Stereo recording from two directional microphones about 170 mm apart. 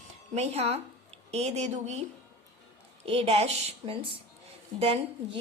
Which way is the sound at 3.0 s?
35° right (ahead or behind).